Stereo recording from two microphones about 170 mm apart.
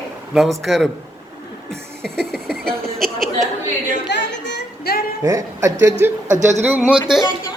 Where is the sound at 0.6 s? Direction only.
Centre (ahead or behind).